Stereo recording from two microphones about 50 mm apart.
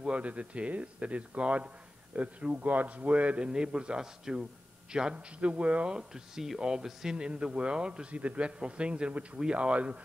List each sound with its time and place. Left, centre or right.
0.0 s a man's voice: right
5.9 s a man's voice: centre